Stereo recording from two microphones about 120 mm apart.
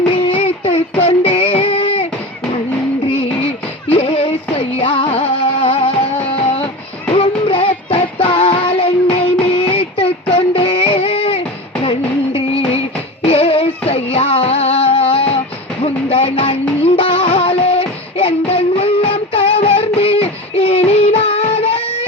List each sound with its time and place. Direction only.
0.3 s child singing: 50° left (ahead or behind)
3.9 s music: 45° left (ahead or behind)
7.2 s child singing: 50° left (ahead or behind)
9.6 s a sound: 50° left (ahead or behind)
13.2 s music: 55° left (ahead or behind)